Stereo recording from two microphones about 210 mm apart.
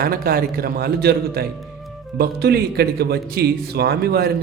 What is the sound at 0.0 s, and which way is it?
A man's voice, 45° right (ahead or behind).